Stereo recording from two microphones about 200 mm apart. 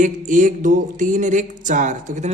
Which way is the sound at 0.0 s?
40° right (ahead or behind).